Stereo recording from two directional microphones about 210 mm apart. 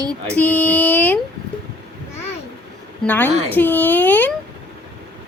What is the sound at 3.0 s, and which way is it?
A woman's voice, 10° left (ahead or behind).